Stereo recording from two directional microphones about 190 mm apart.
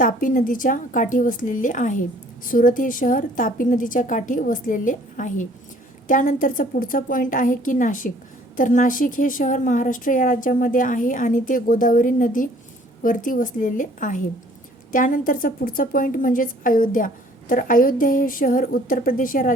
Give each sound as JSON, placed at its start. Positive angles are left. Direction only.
{"t": 0.0, "sound": "a woman's voice", "side_deg": 45}